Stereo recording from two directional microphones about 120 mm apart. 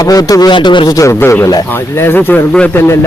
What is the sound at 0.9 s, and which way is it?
Speech, 20° left (ahead or behind).